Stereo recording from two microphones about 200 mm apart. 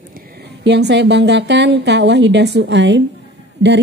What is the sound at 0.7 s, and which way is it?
A woman's voice, 60° right (ahead or behind).